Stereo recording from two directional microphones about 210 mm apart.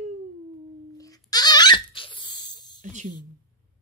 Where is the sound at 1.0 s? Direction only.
15° left (ahead or behind).